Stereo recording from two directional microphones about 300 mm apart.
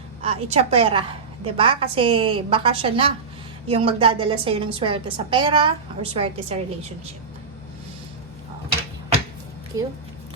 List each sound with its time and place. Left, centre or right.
0.2 s a woman's voice: centre
9.7 s a woman's voice: centre